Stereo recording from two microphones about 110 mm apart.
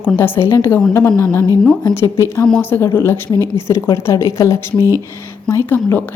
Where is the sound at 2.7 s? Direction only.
25° left (ahead or behind).